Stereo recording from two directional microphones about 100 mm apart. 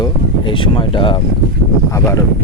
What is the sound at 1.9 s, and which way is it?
Speech, 30° left (ahead or behind).